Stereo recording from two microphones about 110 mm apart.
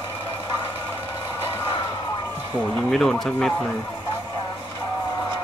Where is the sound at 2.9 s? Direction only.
5° left (ahead or behind).